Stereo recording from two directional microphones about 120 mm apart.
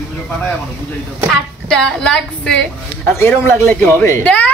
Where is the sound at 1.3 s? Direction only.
5° left (ahead or behind).